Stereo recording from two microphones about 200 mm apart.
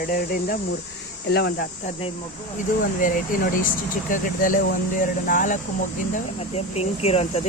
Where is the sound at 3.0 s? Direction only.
40° left (ahead or behind).